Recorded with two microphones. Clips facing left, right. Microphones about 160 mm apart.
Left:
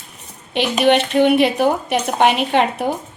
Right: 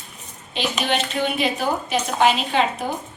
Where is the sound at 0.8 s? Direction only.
65° left (ahead or behind).